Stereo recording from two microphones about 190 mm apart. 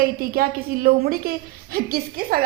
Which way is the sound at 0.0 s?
50° right (ahead or behind).